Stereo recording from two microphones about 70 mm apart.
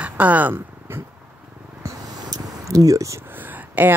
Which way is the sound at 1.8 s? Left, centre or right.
Right.